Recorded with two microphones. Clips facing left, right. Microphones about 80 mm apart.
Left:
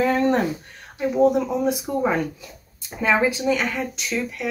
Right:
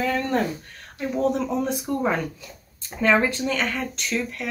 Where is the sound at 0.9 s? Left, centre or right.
Centre.